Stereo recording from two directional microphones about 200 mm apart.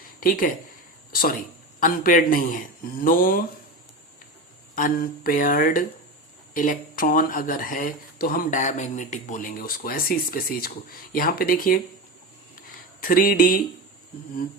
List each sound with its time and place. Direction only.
0.2 s speech: 45° left (ahead or behind)
4.7 s speech: 45° left (ahead or behind)
13.0 s speech: 45° left (ahead or behind)